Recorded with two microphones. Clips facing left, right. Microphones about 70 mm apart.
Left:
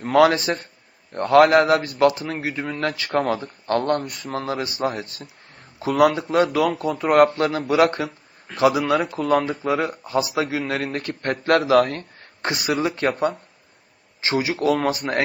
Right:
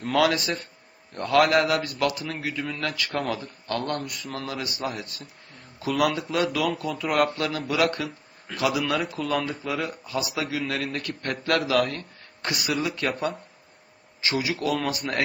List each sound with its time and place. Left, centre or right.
0.2 s speech: left
9.0 s speech: left
10.0 s speech: left
12.4 s speech: left